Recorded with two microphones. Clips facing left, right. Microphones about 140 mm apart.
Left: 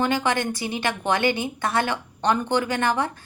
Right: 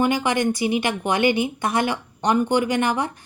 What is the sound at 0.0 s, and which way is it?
A woman's voice, 15° right (ahead or behind).